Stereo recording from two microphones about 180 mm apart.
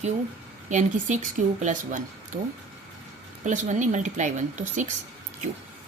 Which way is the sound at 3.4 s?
45° right (ahead or behind).